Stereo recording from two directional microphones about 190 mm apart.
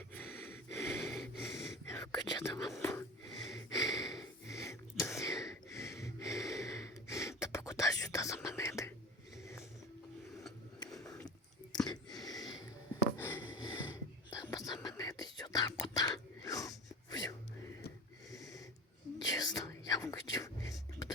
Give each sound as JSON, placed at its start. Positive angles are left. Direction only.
{"t": 0.1, "sound": "gasp", "side_deg": 10}
{"t": 10.9, "sound": "a sound", "side_deg": 15}
{"t": 13.5, "sound": "whispering", "side_deg": 25}
{"t": 18.3, "sound": "snort", "side_deg": 15}
{"t": 19.2, "sound": "whispering", "side_deg": 20}